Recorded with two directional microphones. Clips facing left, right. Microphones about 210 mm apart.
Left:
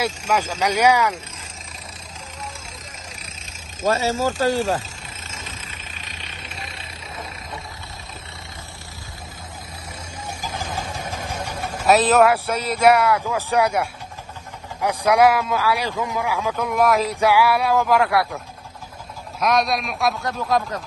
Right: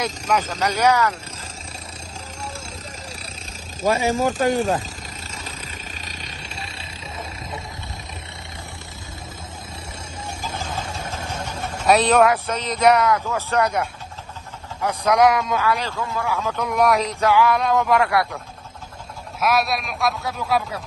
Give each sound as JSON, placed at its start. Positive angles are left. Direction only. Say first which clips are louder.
{"t": 0.0, "sound": "a man's voice", "louder": "even", "side_deg": 10}
{"t": 3.8, "sound": "speech", "louder": "right 1 dB", "side_deg": -15}
{"t": 6.0, "sound": "vehicle", "louder": "right 2 dB", "side_deg": -35}
{"t": 10.5, "sound": "vehicle", "louder": "left 1 dB", "side_deg": 10}
{"t": 14.8, "sound": "a man's voice", "louder": "left 1 dB", "side_deg": 10}
{"t": 16.5, "sound": "a man's voice", "louder": "even", "side_deg": 0}
{"t": 17.1, "sound": "a man's voice", "louder": "even", "side_deg": 10}
{"t": 19.4, "sound": "a man's voice", "louder": "left 1 dB", "side_deg": -5}